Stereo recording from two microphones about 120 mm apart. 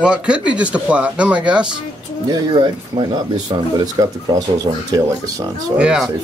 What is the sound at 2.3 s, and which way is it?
Speech, 40° right (ahead or behind).